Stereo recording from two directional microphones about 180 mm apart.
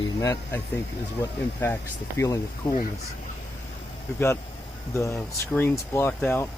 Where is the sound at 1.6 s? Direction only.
15° left (ahead or behind).